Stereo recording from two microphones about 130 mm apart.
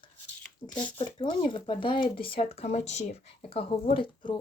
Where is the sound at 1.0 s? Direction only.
40° left (ahead or behind).